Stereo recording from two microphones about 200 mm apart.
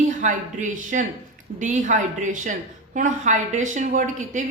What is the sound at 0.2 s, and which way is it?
A woman's voice, 40° right (ahead or behind).